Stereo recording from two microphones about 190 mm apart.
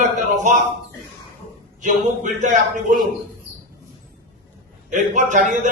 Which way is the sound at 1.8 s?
40° right (ahead or behind).